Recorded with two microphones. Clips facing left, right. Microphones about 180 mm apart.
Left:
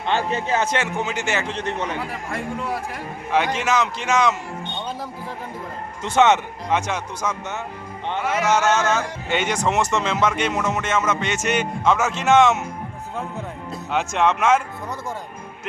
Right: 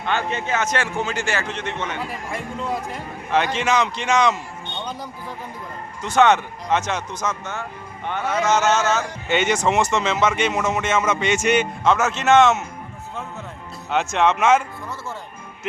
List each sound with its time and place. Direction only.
0.0 s a man's voice: 30° left (ahead or behind)
1.5 s a man's voice: 35° left (ahead or behind)
2.0 s speech: 20° right (ahead or behind)
3.3 s a man's voice: 10° left (ahead or behind)
6.0 s a man's voice: 25° left (ahead or behind)
6.7 s a man's voice: 10° left (ahead or behind)
9.6 s music: 10° right (ahead or behind)
9.9 s a man's voice: 5° right (ahead or behind)
10.4 s music: 5° right (ahead or behind)
11.6 s a man's voice: centre (ahead or behind)
12.2 s a man's voice: 10° left (ahead or behind)
13.9 s a man's voice: centre (ahead or behind)